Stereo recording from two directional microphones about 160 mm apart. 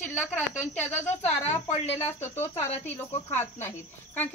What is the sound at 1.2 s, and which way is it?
Speech, 45° left (ahead or behind).